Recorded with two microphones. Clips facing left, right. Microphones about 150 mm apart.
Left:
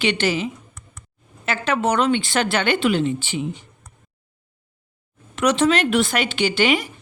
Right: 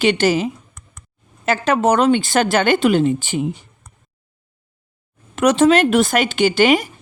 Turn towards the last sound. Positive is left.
turn(degrees=-40)  # may be behind; listen again after turning